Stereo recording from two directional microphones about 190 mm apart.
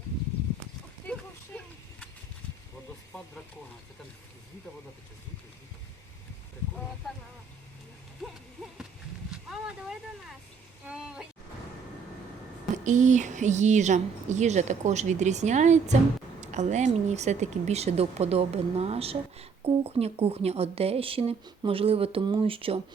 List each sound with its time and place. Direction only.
8.2 s hoot: centre (ahead or behind)
9.3 s speech: 5° right (ahead or behind)
12.7 s speech: 40° right (ahead or behind)